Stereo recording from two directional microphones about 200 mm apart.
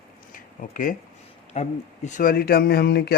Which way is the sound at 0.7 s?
45° left (ahead or behind).